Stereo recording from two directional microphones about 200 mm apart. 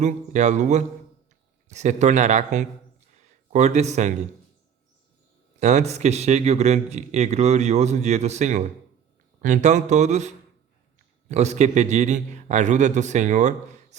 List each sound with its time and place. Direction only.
0.0 s speech: 35° right (ahead or behind)
3.2 s a sound: 35° right (ahead or behind)
5.5 s speech: 35° right (ahead or behind)